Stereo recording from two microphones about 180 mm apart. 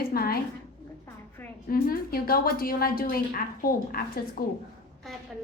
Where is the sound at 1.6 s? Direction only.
55° left (ahead or behind).